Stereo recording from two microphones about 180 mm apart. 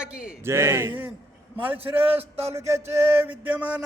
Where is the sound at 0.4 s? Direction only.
15° right (ahead or behind).